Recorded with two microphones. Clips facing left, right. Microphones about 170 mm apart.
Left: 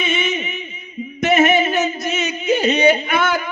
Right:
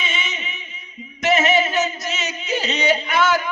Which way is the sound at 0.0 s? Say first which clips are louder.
Left 8 dB; 55° left (ahead or behind).